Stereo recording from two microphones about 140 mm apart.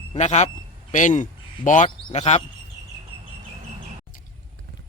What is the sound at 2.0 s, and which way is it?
Speech, 50° left (ahead or behind).